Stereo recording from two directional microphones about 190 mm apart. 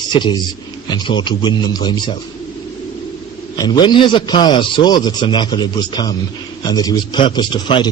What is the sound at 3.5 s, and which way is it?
A man's voice, 20° left (ahead or behind).